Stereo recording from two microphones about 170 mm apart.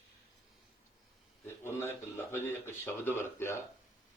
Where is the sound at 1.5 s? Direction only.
15° left (ahead or behind).